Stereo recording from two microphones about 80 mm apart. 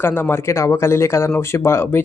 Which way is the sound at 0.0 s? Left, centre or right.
Left.